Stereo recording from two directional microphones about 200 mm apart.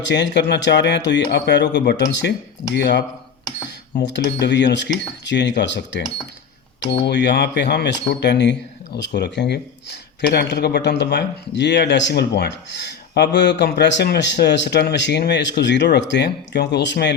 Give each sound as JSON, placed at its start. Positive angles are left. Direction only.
{"t": 0.0, "sound": "speech", "side_deg": 60}
{"t": 7.0, "sound": "speech", "side_deg": 60}